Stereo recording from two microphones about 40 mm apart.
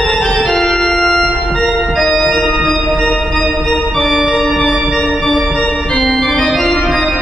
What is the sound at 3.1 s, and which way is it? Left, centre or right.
Music, centre.